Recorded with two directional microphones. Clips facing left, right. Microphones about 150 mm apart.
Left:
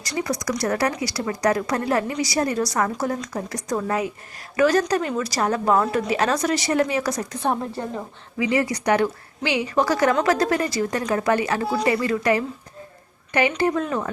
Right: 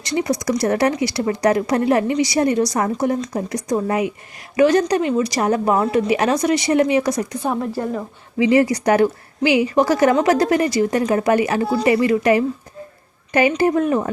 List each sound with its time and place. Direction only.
0.0 s a woman's voice: 25° right (ahead or behind)
7.4 s a woman's voice: centre (ahead or behind)
8.4 s a woman's voice: 25° right (ahead or behind)